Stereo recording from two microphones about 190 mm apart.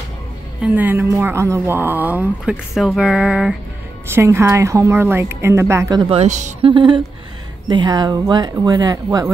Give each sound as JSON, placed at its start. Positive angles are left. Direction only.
{"t": 0.6, "sound": "speech", "side_deg": -10}
{"t": 6.7, "sound": "speech", "side_deg": -25}